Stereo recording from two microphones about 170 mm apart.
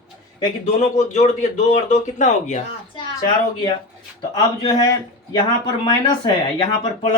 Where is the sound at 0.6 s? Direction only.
45° left (ahead or behind).